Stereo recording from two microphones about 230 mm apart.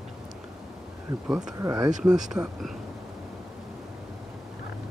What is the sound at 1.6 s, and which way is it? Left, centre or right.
Speech, centre.